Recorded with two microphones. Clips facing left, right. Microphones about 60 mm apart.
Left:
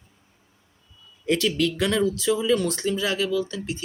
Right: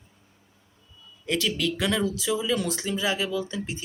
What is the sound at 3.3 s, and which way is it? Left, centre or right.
Speech, right.